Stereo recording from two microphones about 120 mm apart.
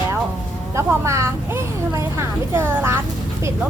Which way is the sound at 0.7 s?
25° right (ahead or behind).